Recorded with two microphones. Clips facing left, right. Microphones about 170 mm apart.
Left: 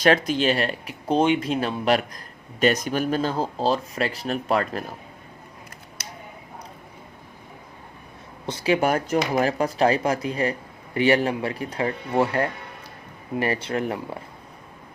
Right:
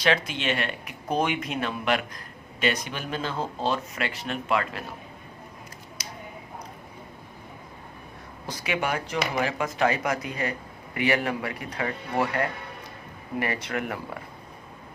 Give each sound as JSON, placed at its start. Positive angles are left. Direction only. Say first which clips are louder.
{"t": 0.0, "sound": "speech", "louder": "left 6 dB", "side_deg": 40}
{"t": 6.0, "sound": "a sound", "louder": "left 1 dB", "side_deg": 60}
{"t": 8.4, "sound": "speech", "louder": "left 7 dB", "side_deg": 30}